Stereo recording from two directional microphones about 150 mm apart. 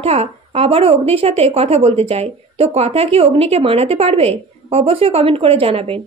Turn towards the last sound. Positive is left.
turn(degrees=-40)  # may be behind; listen again after turning